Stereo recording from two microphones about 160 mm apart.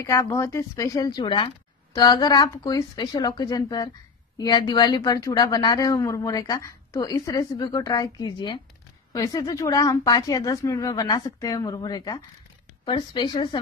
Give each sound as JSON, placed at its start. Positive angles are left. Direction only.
{"t": 0.0, "sound": "a woman's voice", "side_deg": 20}